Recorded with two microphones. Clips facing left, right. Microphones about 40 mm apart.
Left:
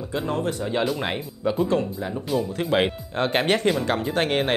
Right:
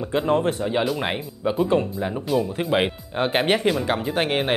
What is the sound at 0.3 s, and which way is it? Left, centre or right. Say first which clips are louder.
Speech: right 6 dB; right.